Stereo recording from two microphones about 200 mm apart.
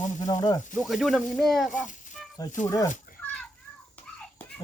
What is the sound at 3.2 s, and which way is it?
Children playing, 5° left (ahead or behind).